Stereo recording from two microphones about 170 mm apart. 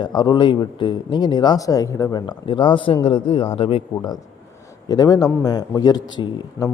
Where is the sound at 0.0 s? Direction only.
25° left (ahead or behind).